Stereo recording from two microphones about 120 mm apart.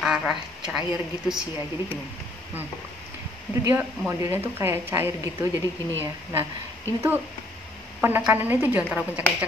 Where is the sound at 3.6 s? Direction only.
20° right (ahead or behind).